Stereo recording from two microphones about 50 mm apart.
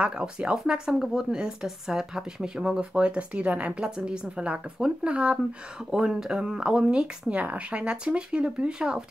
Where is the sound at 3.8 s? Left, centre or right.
Centre.